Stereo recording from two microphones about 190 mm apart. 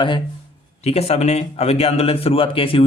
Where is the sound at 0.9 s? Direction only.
35° left (ahead or behind).